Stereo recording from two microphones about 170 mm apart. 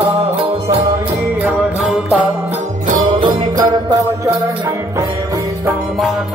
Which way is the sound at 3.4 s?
25° right (ahead or behind).